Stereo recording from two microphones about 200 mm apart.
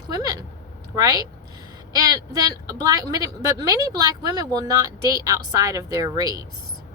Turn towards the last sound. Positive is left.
turn(degrees=-20)  # may be behind; listen again after turning